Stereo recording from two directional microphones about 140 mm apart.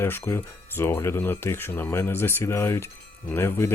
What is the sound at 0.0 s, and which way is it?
Speech, 15° left (ahead or behind).